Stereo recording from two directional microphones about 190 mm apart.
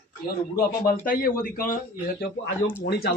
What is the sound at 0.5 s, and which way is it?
A man's voice, 50° left (ahead or behind).